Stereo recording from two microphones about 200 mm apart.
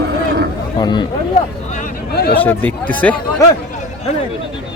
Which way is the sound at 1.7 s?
45° left (ahead or behind).